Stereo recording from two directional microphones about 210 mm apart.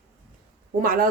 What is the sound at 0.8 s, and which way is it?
Speech, 40° right (ahead or behind).